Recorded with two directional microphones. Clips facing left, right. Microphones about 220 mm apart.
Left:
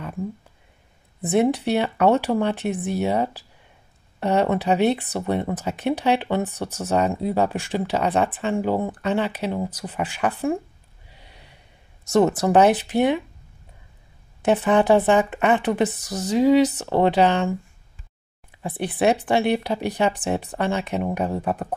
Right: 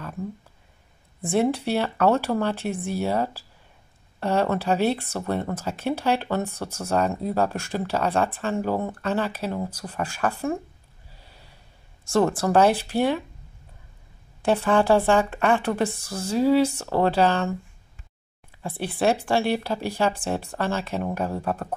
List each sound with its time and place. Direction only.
1.2 s a woman's voice: 20° left (ahead or behind)
11.2 s gasp: 20° left (ahead or behind)
12.1 s a woman's voice: 20° left (ahead or behind)
14.4 s a woman's voice: 20° left (ahead or behind)
18.6 s a woman's voice: 20° left (ahead or behind)